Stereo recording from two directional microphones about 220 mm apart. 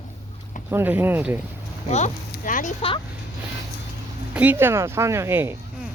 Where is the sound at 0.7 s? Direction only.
10° right (ahead or behind).